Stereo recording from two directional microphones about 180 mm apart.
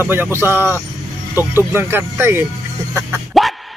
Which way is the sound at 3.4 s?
Centre (ahead or behind).